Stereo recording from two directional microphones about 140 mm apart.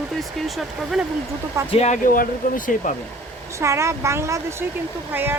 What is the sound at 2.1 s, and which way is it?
Speech, 75° left (ahead or behind).